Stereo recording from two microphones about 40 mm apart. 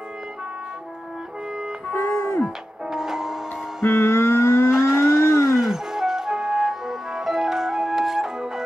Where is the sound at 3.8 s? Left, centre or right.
Left.